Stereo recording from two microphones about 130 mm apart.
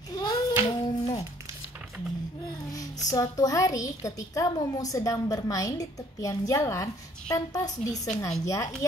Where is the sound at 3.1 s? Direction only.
30° left (ahead or behind).